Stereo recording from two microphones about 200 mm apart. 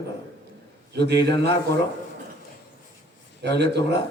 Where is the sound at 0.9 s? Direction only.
60° right (ahead or behind).